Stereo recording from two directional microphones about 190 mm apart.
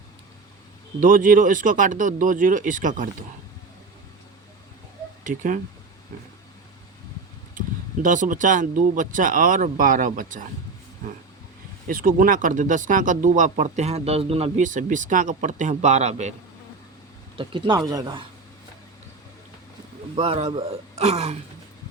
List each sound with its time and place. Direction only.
0.9 s speech: 45° right (ahead or behind)
5.2 s speech: 45° right (ahead or behind)
8.0 s speech: 45° right (ahead or behind)
11.9 s speech: 45° right (ahead or behind)
17.3 s speech: 25° right (ahead or behind)
20.1 s speech: 35° right (ahead or behind)